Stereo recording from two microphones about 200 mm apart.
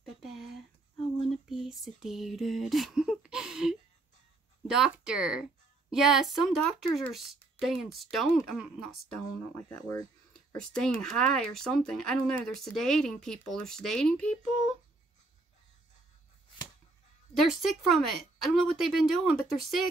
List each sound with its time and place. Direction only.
0.0 s a sound: centre (ahead or behind)
4.6 s a woman's voice: 5° right (ahead or behind)
9.7 s speech: 20° left (ahead or behind)
10.3 s a sound: 5° left (ahead or behind)
11.0 s a woman's voice: centre (ahead or behind)
17.5 s a woman's voice: centre (ahead or behind)